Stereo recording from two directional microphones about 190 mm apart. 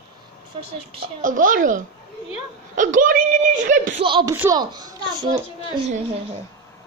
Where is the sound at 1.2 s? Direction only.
45° right (ahead or behind).